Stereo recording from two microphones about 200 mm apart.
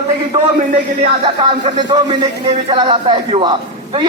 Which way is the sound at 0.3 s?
25° right (ahead or behind).